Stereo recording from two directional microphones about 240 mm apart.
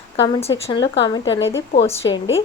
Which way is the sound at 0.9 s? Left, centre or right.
Left.